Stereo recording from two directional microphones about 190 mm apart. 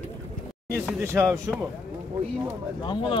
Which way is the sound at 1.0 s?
15° right (ahead or behind).